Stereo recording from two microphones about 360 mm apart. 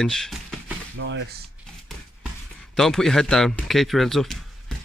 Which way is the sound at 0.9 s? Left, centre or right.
Right.